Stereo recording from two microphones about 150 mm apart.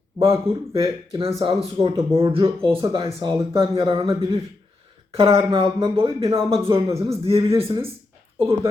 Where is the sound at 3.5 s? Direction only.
40° right (ahead or behind).